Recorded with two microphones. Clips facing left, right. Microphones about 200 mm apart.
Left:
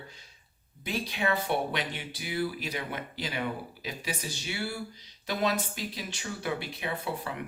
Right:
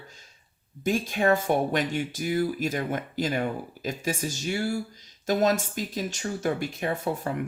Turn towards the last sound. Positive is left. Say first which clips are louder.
# right 6 dB
turn(degrees=-45)  # may be behind; listen again after turning